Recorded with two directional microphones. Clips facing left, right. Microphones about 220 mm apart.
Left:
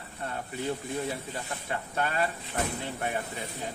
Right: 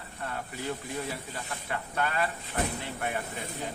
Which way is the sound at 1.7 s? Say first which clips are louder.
Even; 25° left (ahead or behind).